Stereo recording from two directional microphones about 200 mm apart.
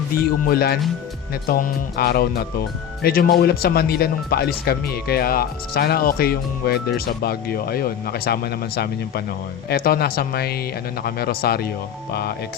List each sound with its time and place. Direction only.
0.2 s speech: 50° left (ahead or behind)